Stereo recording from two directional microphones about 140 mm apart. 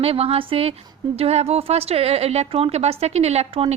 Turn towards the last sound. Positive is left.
turn(degrees=-50)  # may be behind; listen again after turning